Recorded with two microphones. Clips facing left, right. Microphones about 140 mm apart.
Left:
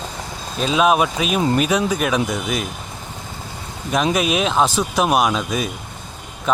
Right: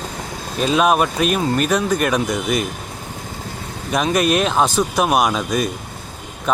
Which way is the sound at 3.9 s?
Centre (ahead or behind).